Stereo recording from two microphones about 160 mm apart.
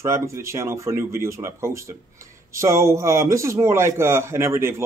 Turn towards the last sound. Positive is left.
turn(degrees=-15)  # may be behind; listen again after turning